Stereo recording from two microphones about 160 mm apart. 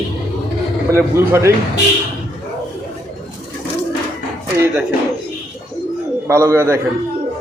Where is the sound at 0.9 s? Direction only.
15° right (ahead or behind).